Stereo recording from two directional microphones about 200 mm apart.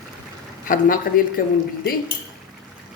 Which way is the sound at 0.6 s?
45° left (ahead or behind).